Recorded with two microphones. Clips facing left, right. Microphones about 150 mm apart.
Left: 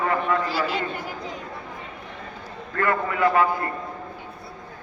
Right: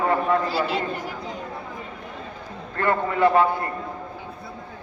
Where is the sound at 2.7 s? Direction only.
25° right (ahead or behind).